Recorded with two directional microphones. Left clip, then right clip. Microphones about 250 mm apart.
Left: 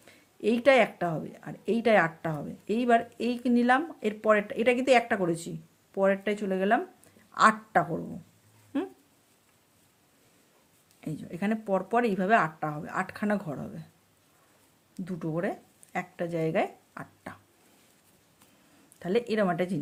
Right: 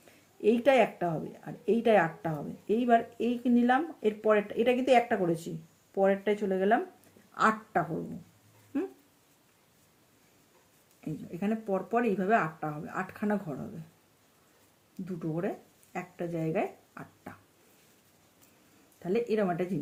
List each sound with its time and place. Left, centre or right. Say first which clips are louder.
0.0 s speech: right 2 dB; left
11.0 s speech: left 2 dB; left
15.0 s speech: left 2 dB; left
18.9 s speech: left 2 dB; left